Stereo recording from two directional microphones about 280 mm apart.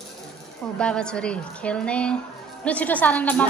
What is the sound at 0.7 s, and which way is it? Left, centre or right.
A woman's voice, centre.